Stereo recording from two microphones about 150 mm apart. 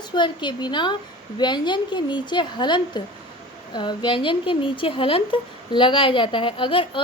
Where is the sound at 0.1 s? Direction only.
30° left (ahead or behind).